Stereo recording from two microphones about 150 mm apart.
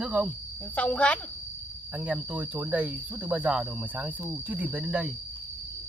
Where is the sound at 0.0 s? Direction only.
5° right (ahead or behind).